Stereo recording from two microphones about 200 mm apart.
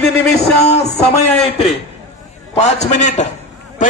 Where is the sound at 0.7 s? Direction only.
35° left (ahead or behind).